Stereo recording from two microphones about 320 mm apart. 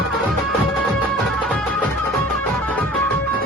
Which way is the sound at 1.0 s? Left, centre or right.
Centre.